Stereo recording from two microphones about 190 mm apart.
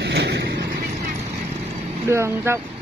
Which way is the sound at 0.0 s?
60° right (ahead or behind).